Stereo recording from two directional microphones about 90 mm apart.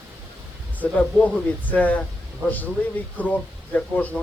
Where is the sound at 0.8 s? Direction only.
15° left (ahead or behind).